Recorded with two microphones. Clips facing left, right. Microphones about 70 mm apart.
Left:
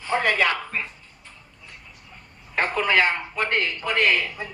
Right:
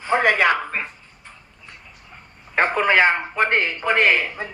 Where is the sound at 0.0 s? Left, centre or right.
Right.